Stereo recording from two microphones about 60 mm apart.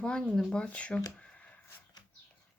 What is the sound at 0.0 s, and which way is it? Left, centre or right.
Speech, centre.